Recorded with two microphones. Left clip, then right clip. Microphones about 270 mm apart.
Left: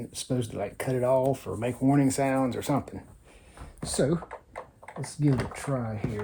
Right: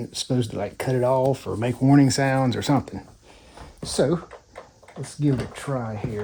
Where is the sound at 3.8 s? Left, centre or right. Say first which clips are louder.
Right 5 dB; right.